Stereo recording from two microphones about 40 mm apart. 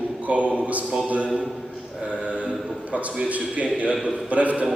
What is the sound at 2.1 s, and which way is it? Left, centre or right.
Mantra, right.